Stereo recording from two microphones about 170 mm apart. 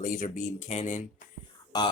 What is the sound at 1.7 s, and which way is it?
Speech, 25° left (ahead or behind).